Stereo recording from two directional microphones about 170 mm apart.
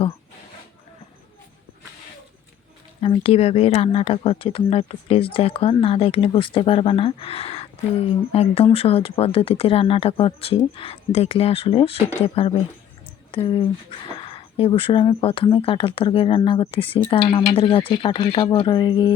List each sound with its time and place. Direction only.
3.0 s speech: 35° left (ahead or behind)